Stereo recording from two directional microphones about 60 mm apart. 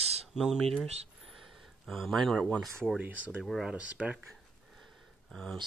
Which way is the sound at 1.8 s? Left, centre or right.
Centre.